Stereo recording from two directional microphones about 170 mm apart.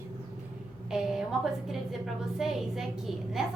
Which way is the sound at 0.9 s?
5° right (ahead or behind).